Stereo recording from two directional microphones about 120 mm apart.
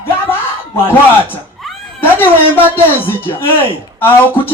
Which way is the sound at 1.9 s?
15° left (ahead or behind).